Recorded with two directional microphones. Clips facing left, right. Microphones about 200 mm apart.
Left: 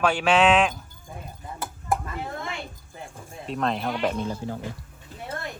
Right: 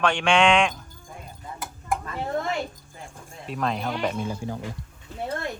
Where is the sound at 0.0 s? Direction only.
5° left (ahead or behind).